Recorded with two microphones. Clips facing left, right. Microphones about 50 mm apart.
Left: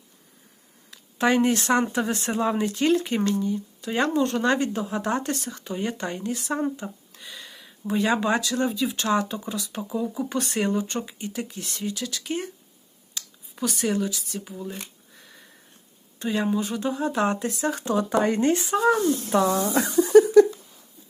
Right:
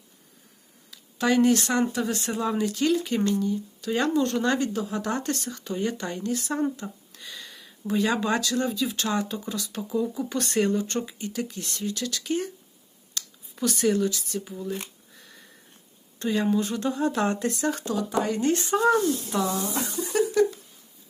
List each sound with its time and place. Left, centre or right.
0.9 s speech: left
5.2 s speech: centre
6.5 s speech: centre
6.7 s a sound: centre
7.3 s a sound: centre
7.9 s speech: left
13.2 s a sound: centre
13.6 s speech: centre
14.7 s a sound: centre
16.1 s speech: centre
17.8 s speech: left
18.5 s speech: centre
19.0 s speech: left